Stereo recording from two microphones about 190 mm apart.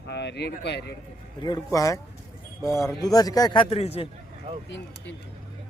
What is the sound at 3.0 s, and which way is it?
A man's voice, 20° left (ahead or behind).